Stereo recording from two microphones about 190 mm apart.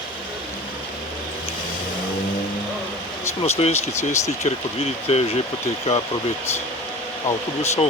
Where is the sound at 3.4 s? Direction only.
35° left (ahead or behind).